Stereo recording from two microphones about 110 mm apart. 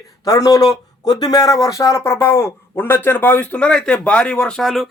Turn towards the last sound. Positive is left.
turn(degrees=0)  # may be behind; listen again after turning